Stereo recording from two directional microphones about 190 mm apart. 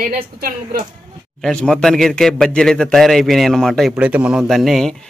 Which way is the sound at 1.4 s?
5° left (ahead or behind).